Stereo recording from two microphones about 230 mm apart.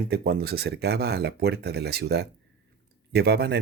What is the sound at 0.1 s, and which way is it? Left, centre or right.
Speech, right.